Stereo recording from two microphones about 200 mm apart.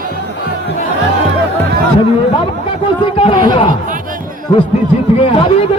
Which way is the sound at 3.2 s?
30° left (ahead or behind).